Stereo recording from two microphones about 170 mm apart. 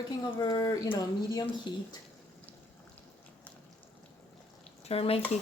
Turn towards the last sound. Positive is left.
turn(degrees=35)  # may be behind; listen again after turning